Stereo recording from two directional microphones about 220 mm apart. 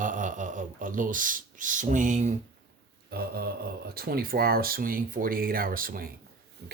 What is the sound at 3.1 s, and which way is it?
Speech, 45° right (ahead or behind).